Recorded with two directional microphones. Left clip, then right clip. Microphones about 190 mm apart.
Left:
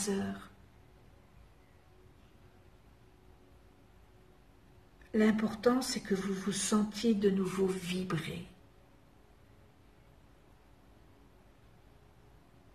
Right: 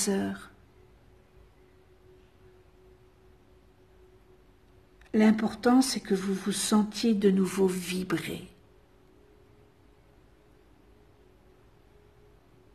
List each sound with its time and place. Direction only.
0.1 s speech: 45° right (ahead or behind)
5.1 s speech: 50° right (ahead or behind)